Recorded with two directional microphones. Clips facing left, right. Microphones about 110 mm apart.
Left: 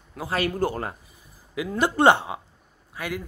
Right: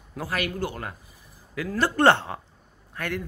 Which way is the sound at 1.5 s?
15° left (ahead or behind).